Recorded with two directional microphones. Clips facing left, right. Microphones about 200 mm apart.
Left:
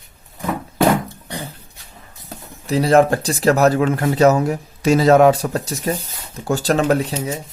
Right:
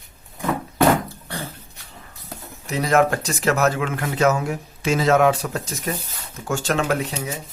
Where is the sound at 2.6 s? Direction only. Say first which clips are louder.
Left 5 dB; 30° left (ahead or behind).